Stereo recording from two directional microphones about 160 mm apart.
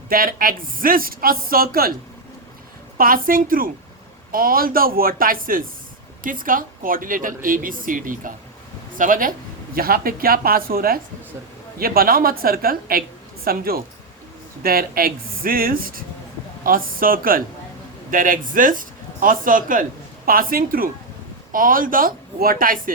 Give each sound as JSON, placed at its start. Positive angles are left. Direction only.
{"t": 0.1, "sound": "a woman's voice", "side_deg": -65}
{"t": 3.0, "sound": "a woman's voice", "side_deg": -60}